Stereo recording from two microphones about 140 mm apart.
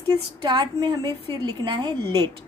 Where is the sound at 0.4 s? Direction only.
30° right (ahead or behind).